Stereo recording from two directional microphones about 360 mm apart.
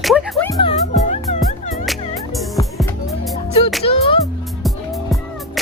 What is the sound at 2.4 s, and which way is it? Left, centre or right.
Music, centre.